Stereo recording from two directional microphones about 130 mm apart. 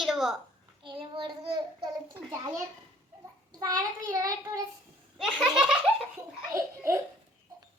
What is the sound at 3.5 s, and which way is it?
Child singing, 30° right (ahead or behind).